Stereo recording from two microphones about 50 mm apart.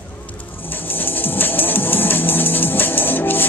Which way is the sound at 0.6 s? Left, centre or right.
Left.